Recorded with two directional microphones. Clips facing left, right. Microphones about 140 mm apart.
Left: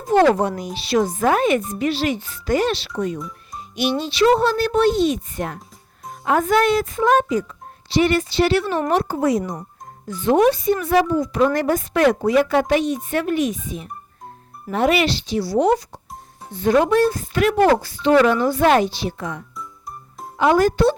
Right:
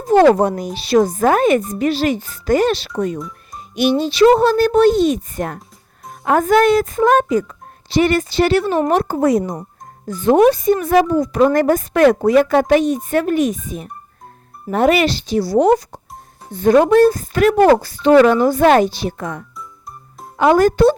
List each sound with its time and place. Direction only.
0.1 s speech: 40° right (ahead or behind)
20.4 s speech: 50° right (ahead or behind)